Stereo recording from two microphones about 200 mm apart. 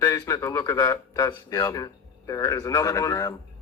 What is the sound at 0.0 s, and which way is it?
A man's voice, 15° left (ahead or behind).